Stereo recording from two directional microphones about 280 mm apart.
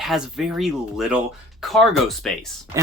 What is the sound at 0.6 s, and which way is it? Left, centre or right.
Speech, centre.